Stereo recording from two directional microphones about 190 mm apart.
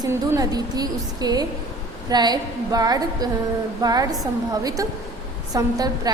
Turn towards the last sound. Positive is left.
turn(degrees=-20)  # may be behind; listen again after turning